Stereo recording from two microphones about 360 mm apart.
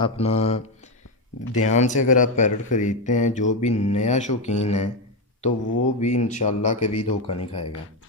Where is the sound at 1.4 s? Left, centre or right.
Left.